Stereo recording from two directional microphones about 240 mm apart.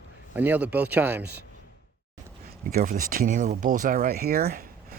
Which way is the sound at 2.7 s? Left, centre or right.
Right.